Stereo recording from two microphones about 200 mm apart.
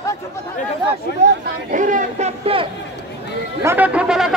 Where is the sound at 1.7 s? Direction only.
40° right (ahead or behind).